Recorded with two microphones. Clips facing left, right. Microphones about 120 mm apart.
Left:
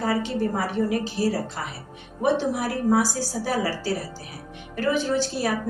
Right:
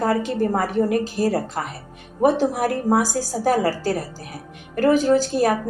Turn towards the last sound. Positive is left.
turn(degrees=-45)  # may be behind; listen again after turning